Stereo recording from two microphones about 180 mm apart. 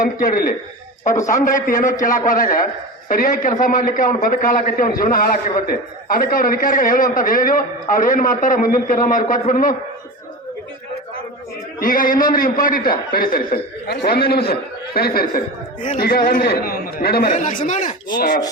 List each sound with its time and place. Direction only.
0.0 s a man's voice: 50° left (ahead or behind)
11.8 s a man's voice: 50° left (ahead or behind)